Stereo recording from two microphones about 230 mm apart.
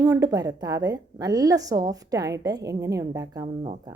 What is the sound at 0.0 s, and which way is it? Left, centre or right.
A woman's voice, centre.